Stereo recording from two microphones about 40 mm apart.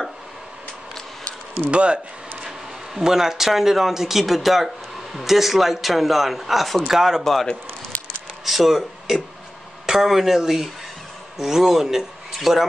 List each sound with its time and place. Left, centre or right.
1.7 s speech: right
2.4 s a man's voice: centre
7.9 s a sound: left
8.5 s a man's voice: centre
9.8 s a man's voice: centre